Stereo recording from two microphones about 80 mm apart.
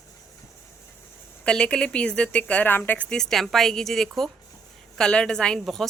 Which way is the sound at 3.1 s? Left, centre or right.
Centre.